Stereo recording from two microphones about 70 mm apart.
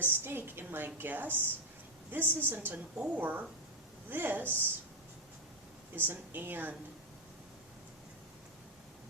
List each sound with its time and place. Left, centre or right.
0.0 s a woman's voice: right
6.0 s a woman's voice: right